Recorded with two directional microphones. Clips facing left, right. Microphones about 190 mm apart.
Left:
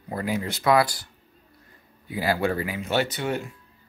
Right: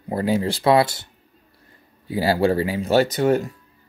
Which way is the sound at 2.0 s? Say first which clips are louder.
Right 6 dB; 30° right (ahead or behind).